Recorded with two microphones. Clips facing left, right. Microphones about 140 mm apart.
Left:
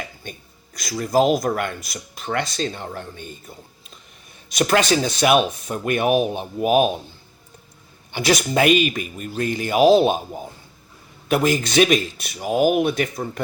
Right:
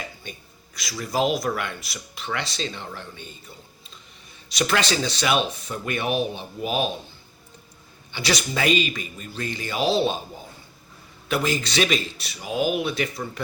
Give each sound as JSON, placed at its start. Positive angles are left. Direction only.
{"t": 0.3, "sound": "speech", "side_deg": 45}
{"t": 4.4, "sound": "speech", "side_deg": 50}
{"t": 8.1, "sound": "speech", "side_deg": 50}
{"t": 11.3, "sound": "speech", "side_deg": 50}